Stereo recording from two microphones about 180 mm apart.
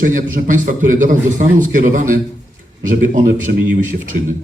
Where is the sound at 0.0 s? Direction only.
50° right (ahead or behind).